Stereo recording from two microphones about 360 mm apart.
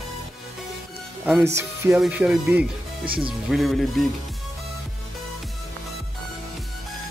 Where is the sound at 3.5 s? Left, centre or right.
Centre.